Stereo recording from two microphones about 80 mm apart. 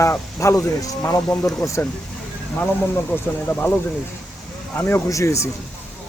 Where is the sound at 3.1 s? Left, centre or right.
Left.